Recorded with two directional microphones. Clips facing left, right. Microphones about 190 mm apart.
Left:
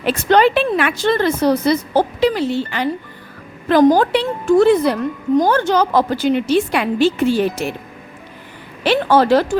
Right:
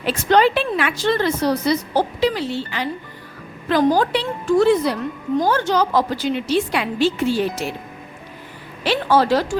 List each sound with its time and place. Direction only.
0.0 s a woman's voice: 55° left (ahead or behind)
8.8 s a woman's voice: 55° left (ahead or behind)